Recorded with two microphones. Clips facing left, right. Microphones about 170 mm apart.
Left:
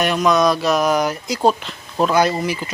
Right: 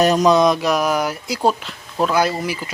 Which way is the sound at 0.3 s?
20° right (ahead or behind).